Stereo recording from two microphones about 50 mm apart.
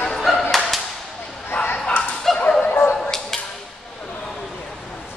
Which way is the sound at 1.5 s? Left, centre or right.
Left.